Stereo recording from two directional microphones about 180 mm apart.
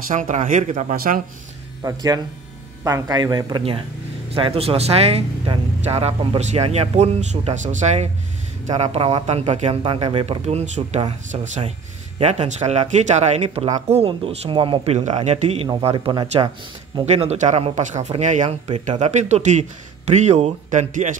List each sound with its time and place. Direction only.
0.1 s speech: 45° right (ahead or behind)
1.8 s speech: 20° right (ahead or behind)
17.0 s speech: 35° right (ahead or behind)